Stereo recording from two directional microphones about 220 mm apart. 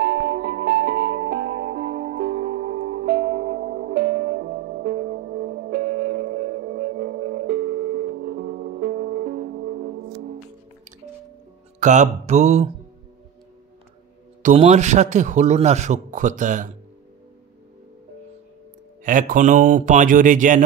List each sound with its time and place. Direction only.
0.0 s music: 45° right (ahead or behind)
11.8 s a man's voice: 30° right (ahead or behind)
14.4 s a man's voice: 30° right (ahead or behind)
19.0 s a man's voice: 35° right (ahead or behind)